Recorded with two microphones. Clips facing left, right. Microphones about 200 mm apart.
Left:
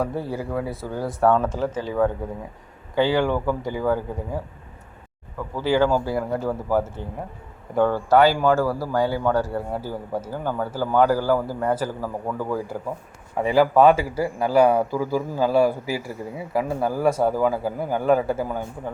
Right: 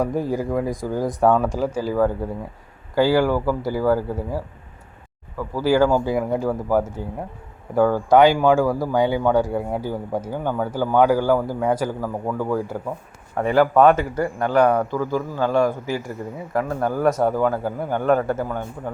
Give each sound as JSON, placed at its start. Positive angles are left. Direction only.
{"t": 0.0, "sound": "speech", "side_deg": -15}
{"t": 5.5, "sound": "speech", "side_deg": -10}
{"t": 10.2, "sound": "a man's voice", "side_deg": 5}
{"t": 11.0, "sound": "speech", "side_deg": -15}
{"t": 11.9, "sound": "a man's voice", "side_deg": 10}